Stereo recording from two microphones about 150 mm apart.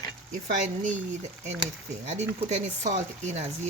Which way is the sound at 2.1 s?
50° right (ahead or behind).